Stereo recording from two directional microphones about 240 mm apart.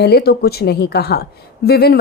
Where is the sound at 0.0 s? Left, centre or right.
Left.